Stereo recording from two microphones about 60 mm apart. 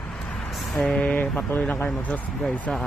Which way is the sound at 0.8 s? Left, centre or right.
Centre.